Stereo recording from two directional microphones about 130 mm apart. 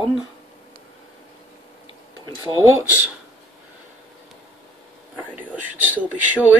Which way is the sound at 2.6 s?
20° right (ahead or behind).